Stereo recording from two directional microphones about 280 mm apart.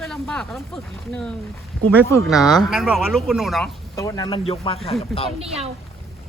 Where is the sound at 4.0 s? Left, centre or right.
Centre.